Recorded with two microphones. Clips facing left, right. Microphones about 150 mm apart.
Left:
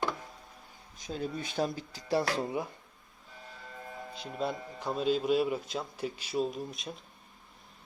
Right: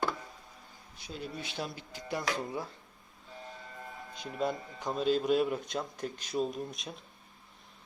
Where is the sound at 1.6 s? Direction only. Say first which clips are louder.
Left 10 dB; 40° left (ahead or behind).